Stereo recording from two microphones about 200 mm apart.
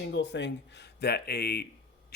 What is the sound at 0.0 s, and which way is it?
Speech, 60° left (ahead or behind).